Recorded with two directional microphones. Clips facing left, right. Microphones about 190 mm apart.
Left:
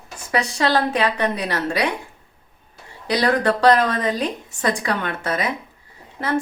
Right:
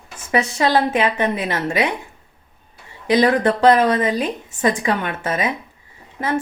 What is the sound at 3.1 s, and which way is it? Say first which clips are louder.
A woman's voice: right 3 dB; 20° right (ahead or behind).